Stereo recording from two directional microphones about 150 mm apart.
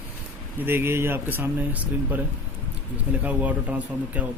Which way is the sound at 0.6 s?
15° right (ahead or behind).